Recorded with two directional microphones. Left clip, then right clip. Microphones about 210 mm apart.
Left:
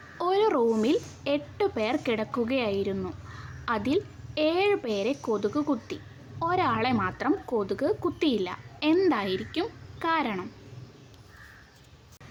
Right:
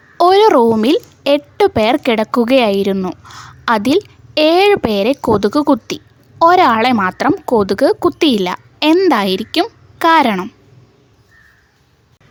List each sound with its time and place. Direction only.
0.2 s a woman's voice: 55° right (ahead or behind)